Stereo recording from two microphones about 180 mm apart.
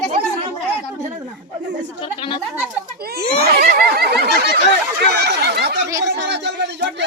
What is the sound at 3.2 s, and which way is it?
Speech, 60° right (ahead or behind).